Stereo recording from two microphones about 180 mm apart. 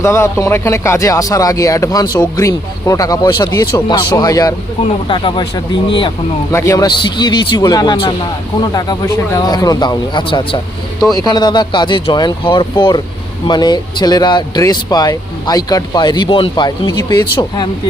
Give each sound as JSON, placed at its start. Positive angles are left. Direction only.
{"t": 0.0, "sound": "speech", "side_deg": 15}
{"t": 6.5, "sound": "speech", "side_deg": 15}